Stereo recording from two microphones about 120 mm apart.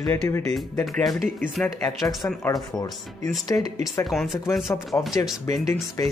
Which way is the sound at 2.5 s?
35° left (ahead or behind).